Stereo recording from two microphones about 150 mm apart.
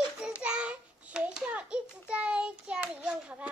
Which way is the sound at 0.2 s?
5° right (ahead or behind).